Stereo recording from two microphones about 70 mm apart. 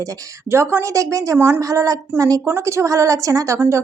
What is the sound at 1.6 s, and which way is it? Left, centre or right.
Speech, right.